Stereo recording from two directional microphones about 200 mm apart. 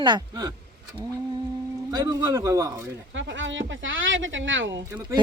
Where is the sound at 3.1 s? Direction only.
70° right (ahead or behind).